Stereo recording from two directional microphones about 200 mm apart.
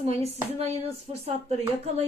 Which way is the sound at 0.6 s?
30° right (ahead or behind).